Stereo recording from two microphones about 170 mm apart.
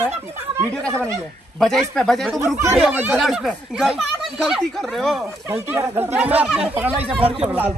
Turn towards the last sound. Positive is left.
turn(degrees=-10)  # may be behind; listen again after turning